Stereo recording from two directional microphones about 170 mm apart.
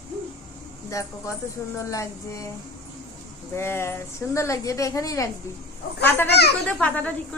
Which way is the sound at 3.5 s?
15° left (ahead or behind).